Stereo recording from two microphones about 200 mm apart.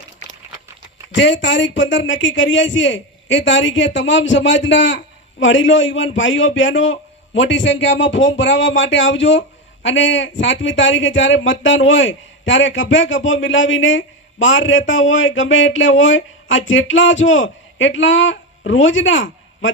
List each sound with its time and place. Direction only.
1.1 s speech: 65° left (ahead or behind)